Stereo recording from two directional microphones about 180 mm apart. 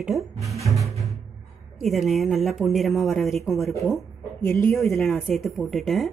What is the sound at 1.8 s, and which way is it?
Speech, centre (ahead or behind).